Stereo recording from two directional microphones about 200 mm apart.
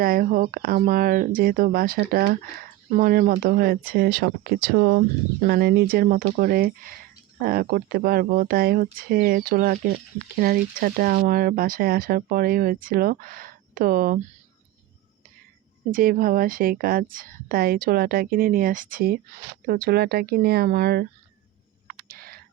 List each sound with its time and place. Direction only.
0.0 s speech: 45° right (ahead or behind)
15.9 s speech: 45° right (ahead or behind)
21.8 s a sound: 50° right (ahead or behind)